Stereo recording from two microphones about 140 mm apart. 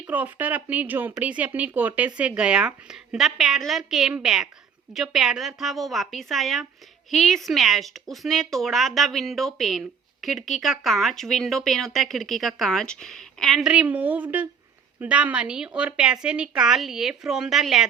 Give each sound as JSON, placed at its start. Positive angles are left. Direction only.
{"t": 0.1, "sound": "speech", "side_deg": -10}